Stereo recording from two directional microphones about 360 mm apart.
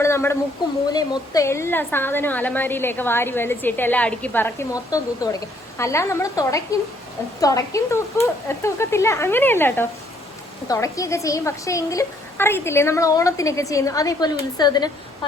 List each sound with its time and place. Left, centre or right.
0.0 s a woman's voice: centre